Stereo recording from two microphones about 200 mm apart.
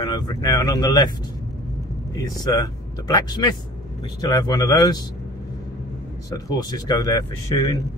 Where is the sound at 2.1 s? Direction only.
15° left (ahead or behind).